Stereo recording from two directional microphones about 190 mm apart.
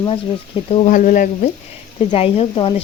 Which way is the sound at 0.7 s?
35° left (ahead or behind).